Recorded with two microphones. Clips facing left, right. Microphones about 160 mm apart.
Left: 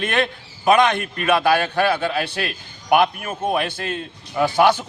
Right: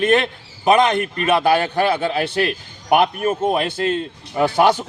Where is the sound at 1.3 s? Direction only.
20° right (ahead or behind).